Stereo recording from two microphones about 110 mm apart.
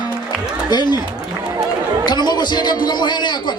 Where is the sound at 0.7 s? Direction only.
40° left (ahead or behind).